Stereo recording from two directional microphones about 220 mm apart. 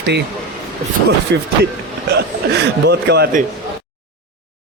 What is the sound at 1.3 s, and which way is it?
Speech, 50° right (ahead or behind).